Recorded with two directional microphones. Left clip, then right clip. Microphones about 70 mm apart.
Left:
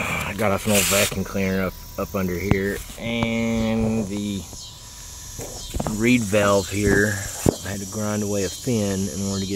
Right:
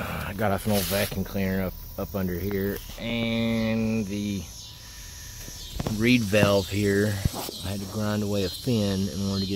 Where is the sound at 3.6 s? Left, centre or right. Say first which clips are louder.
Left 4 dB; centre.